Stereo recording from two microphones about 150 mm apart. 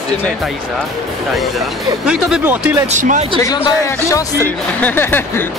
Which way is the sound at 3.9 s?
20° left (ahead or behind).